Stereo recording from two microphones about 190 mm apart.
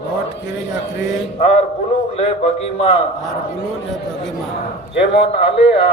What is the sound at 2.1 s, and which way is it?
Speech, 30° left (ahead or behind).